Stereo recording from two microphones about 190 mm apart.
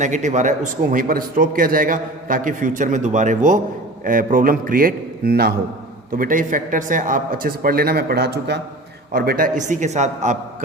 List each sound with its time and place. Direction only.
0.0 s a man's voice: 40° right (ahead or behind); by 8.6 s 60° right (ahead or behind)
9.1 s a man's voice: 50° right (ahead or behind)